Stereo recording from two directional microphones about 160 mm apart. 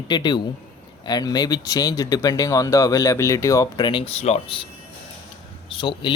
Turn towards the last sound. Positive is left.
turn(degrees=30)  # may be behind; listen again after turning